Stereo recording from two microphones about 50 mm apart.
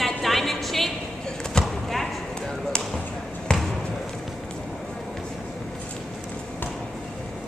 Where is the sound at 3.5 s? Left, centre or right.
Centre.